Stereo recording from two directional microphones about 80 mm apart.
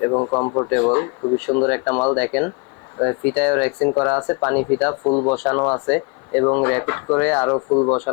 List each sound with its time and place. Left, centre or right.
0.1 s speech: left
0.7 s speech: centre
4.2 s speech: left
4.4 s speech: centre
5.0 s speech: left
5.3 s speech: centre
7.5 s speech: left
7.9 s speech: left